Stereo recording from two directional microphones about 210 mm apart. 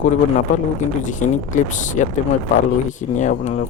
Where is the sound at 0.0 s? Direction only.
35° left (ahead or behind).